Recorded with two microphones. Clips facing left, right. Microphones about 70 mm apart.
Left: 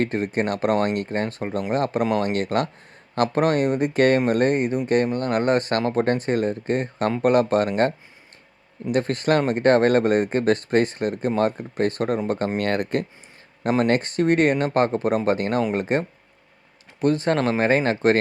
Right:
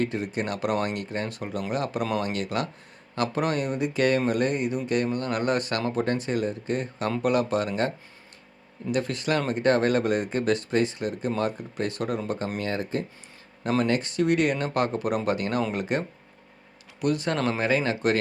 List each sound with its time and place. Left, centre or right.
0.0 s speech: left
12.5 s speech: left
13.8 s speech: left